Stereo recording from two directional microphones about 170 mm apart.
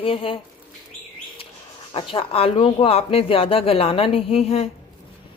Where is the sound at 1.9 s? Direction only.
30° left (ahead or behind).